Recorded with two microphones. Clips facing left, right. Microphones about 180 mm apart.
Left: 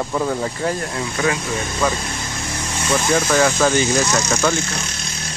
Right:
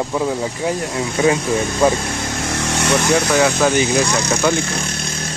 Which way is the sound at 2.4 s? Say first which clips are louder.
Right 5 dB; 75° right (ahead or behind).